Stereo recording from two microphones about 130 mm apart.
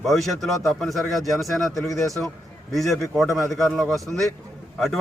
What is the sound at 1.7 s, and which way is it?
Speech, 25° left (ahead or behind).